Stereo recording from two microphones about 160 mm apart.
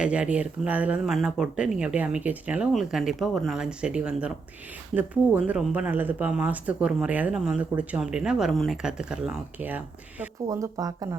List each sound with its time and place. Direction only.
0.0 s speech: 5° right (ahead or behind)
10.4 s speech: 20° right (ahead or behind)